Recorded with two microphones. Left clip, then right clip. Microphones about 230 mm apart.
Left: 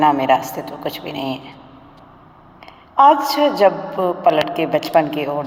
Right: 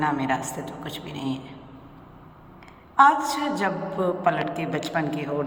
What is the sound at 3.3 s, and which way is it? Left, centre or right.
A woman's voice, left.